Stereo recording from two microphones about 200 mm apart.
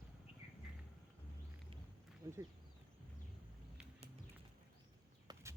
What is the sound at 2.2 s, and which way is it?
Speech, 20° right (ahead or behind).